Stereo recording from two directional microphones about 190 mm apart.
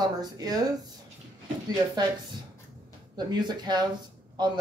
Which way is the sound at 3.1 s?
20° right (ahead or behind).